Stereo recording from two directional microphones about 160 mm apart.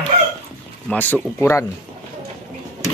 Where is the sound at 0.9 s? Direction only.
10° left (ahead or behind).